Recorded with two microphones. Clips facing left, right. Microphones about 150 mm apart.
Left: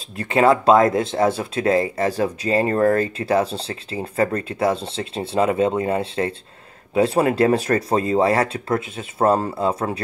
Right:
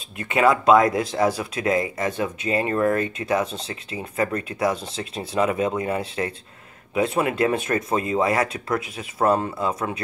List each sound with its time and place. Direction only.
0.2 s speech: 30° left (ahead or behind)